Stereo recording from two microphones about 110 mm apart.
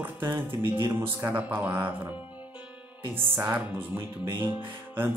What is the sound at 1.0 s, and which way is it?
Speech, 20° right (ahead or behind).